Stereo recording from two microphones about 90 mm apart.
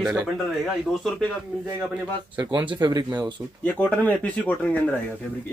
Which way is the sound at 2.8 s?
50° right (ahead or behind).